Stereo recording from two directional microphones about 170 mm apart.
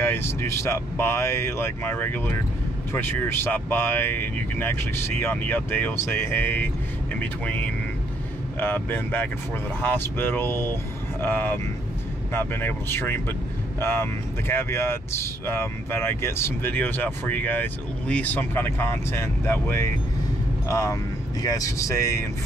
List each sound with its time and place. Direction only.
0.0 s speech: 15° left (ahead or behind)